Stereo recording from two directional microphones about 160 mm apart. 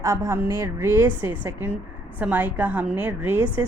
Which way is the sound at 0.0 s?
20° right (ahead or behind).